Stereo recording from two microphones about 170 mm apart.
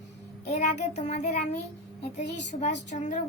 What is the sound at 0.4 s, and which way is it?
Child singing, 40° left (ahead or behind).